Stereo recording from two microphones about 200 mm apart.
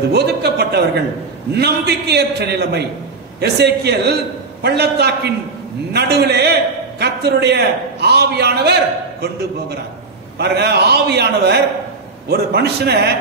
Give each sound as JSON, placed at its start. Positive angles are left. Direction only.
{"t": 0.1, "sound": "a man's voice", "side_deg": -55}